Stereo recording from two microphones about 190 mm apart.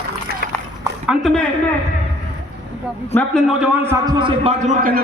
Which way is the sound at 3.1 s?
5° left (ahead or behind).